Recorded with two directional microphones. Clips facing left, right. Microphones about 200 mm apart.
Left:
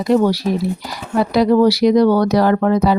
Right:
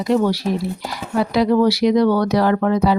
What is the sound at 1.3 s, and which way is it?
Speech, 40° left (ahead or behind).